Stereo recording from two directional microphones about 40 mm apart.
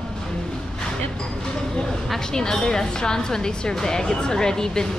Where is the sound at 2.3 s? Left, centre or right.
Centre.